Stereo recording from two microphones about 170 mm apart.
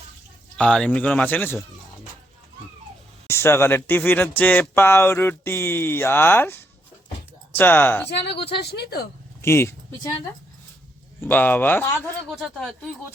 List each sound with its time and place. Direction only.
0.5 s speech: 5° left (ahead or behind)
3.2 s speech: 15° left (ahead or behind)
8.4 s speech: 75° left (ahead or behind)
9.4 s speech: 15° left (ahead or behind)
11.2 s speech: 10° left (ahead or behind)